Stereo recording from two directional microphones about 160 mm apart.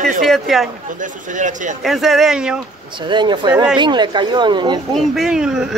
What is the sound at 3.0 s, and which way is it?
A woman's voice, 30° right (ahead or behind).